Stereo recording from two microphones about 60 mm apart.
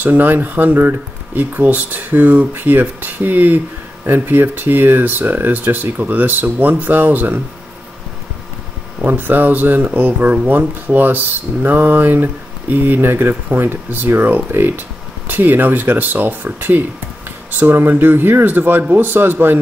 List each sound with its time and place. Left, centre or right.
0.0 s speech: right
9.0 s speech: right